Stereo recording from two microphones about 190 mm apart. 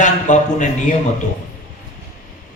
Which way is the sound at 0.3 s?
40° left (ahead or behind).